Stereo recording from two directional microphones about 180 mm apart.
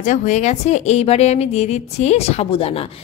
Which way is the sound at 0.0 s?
45° left (ahead or behind).